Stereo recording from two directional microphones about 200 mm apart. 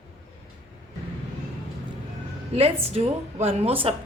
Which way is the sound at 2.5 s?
30° right (ahead or behind).